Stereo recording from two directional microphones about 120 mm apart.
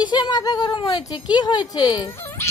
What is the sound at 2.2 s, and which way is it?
Dog, 20° left (ahead or behind).